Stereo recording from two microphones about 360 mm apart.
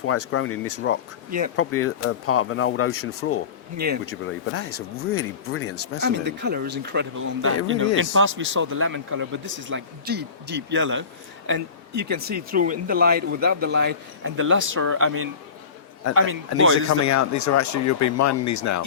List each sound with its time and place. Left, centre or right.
0.0 s speech: left
6.1 s a man's voice: right
17.0 s speech: left